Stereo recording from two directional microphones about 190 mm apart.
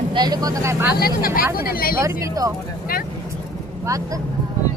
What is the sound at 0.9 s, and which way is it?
Speech, 50° left (ahead or behind).